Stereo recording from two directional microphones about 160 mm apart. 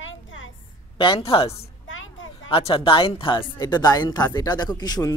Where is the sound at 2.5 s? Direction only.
35° left (ahead or behind).